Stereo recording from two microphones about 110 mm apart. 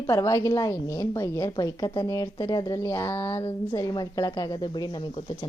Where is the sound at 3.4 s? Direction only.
35° left (ahead or behind).